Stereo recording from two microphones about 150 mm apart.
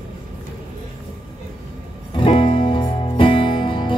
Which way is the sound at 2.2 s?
35° left (ahead or behind).